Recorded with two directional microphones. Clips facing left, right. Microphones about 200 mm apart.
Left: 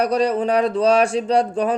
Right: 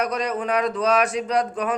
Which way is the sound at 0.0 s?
30° left (ahead or behind).